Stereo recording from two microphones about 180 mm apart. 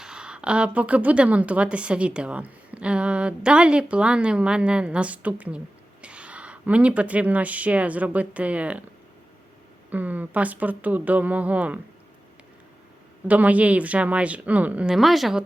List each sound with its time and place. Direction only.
0.0 s a woman's voice: 5° right (ahead or behind)
9.9 s speech: 10° right (ahead or behind)
13.2 s speech: 10° right (ahead or behind)